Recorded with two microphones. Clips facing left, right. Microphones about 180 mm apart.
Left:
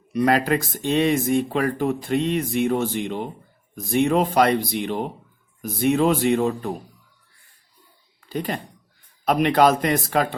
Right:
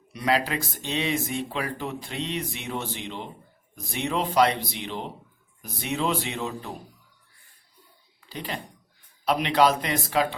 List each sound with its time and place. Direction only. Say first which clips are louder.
0.1 s speech: left 6 dB; 50° left (ahead or behind)
8.3 s speech: left 7 dB; 50° left (ahead or behind)